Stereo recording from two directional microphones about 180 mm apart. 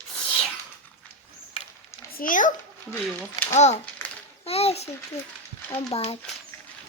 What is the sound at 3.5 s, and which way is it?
A child's voice, 40° left (ahead or behind).